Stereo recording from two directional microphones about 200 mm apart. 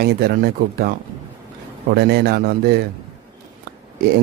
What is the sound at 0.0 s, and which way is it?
Speech, 55° right (ahead or behind).